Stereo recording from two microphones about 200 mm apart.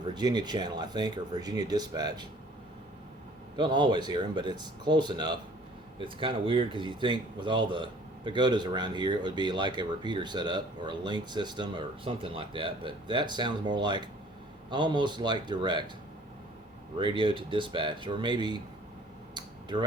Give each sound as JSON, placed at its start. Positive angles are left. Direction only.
{"t": 0.1, "sound": "speech", "side_deg": -20}
{"t": 3.6, "sound": "speech", "side_deg": -20}
{"t": 17.0, "sound": "speech", "side_deg": -25}
{"t": 19.3, "sound": "a sound", "side_deg": -20}